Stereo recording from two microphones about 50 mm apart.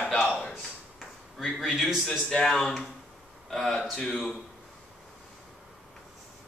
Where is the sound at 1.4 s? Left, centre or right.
Centre.